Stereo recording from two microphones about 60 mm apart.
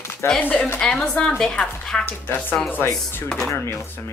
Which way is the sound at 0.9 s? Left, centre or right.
Centre.